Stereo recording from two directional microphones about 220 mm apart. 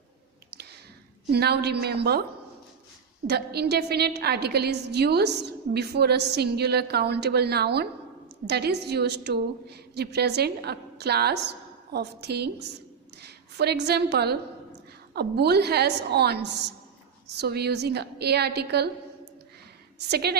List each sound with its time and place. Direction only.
0.5 s a sound: 45° right (ahead or behind)
1.3 s a woman's voice: 45° right (ahead or behind)
3.2 s a woman's voice: 45° right (ahead or behind)
20.1 s a woman's voice: 45° right (ahead or behind)